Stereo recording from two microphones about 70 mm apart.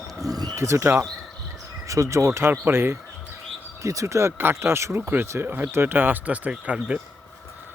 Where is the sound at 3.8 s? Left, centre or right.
Right; by 7.0 s centre.